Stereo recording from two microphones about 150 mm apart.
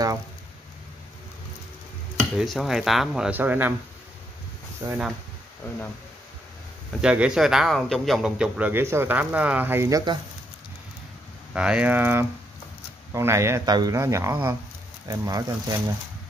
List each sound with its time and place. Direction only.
2.3 s speech: centre (ahead or behind)
4.8 s speech: 20° right (ahead or behind)
7.0 s a man's voice: 5° right (ahead or behind); by 10.1 s 25° right (ahead or behind)
11.5 s a man's voice: 5° right (ahead or behind); by 15.8 s 20° right (ahead or behind)